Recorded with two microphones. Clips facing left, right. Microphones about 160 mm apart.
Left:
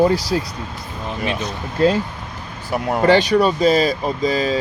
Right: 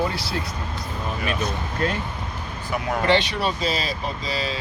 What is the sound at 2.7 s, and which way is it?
Speech, 40° left (ahead or behind).